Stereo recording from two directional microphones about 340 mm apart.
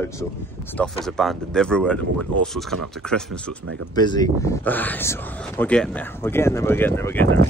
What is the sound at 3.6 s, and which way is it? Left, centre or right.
Speech, right.